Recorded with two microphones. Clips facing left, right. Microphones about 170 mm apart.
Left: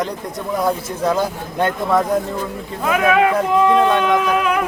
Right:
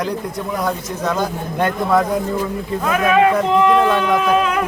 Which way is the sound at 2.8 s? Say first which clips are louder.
Even; 10° left (ahead or behind).